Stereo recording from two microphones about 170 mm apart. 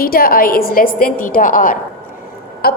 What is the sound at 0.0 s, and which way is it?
A woman's voice, 60° left (ahead or behind).